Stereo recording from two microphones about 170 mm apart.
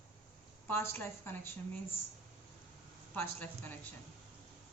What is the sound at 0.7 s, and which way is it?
Speech, 15° left (ahead or behind).